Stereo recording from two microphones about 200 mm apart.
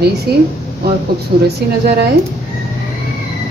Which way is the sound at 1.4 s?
55° right (ahead or behind).